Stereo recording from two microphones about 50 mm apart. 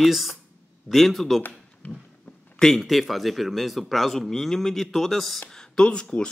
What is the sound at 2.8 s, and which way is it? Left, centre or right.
Speech, centre.